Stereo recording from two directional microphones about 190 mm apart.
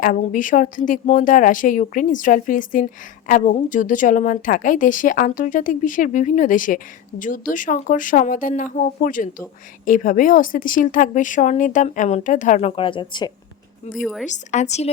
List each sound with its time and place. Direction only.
0.0 s speech: 45° left (ahead or behind); by 13.3 s 25° left (ahead or behind)
14.0 s a woman's voice: centre (ahead or behind)
14.3 s a woman's voice: 40° left (ahead or behind)